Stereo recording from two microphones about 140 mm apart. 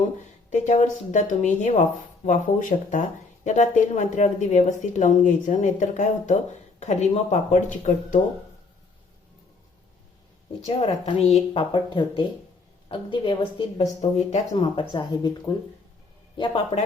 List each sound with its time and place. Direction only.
0.5 s speech: 55° left (ahead or behind)
10.7 s speech: 45° left (ahead or behind)
11.7 s a woman's voice: 35° left (ahead or behind)
14.0 s speech: 55° left (ahead or behind)
14.5 s a woman's voice: 40° left (ahead or behind)